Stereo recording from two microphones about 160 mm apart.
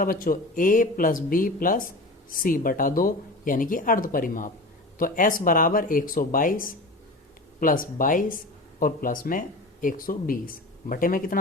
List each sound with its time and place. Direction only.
0.0 s speech: 60° left (ahead or behind)